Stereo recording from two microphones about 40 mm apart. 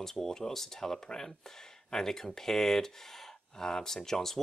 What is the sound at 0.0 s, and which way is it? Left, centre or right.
Speech, centre.